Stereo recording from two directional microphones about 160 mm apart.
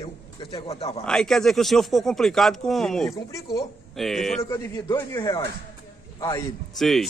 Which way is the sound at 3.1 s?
20° left (ahead or behind).